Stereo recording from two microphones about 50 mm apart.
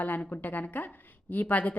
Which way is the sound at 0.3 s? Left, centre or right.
Left.